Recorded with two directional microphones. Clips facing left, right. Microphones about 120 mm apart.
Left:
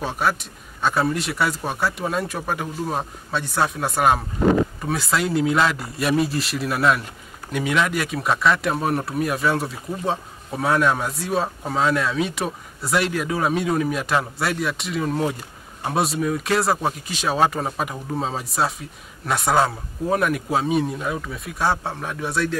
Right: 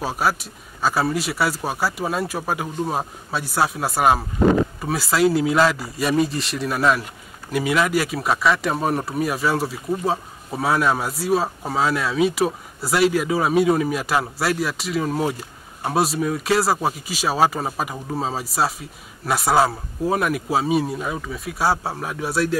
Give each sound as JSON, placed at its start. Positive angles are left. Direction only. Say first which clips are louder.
{"t": 0.0, "sound": "speech", "louder": "right 1 dB", "side_deg": -5}